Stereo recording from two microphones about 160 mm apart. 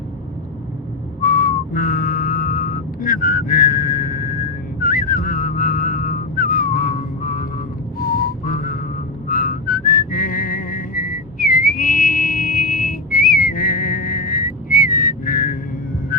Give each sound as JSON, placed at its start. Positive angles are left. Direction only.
{"t": 1.2, "sound": "whistling", "side_deg": 60}